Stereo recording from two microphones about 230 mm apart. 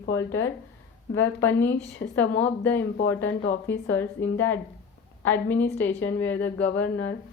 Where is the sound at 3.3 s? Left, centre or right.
Left.